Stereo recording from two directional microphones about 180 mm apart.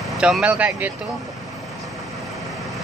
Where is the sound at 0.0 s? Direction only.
Centre (ahead or behind).